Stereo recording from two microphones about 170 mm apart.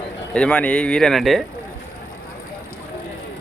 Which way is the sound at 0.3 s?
5° left (ahead or behind).